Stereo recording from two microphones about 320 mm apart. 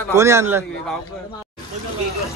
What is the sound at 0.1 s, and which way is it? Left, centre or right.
Speech, centre.